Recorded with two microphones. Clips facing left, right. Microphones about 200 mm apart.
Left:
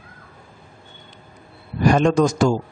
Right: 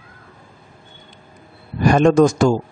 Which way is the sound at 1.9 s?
55° right (ahead or behind).